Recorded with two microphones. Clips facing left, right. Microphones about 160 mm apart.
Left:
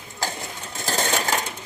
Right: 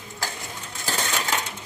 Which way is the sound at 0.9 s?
45° left (ahead or behind).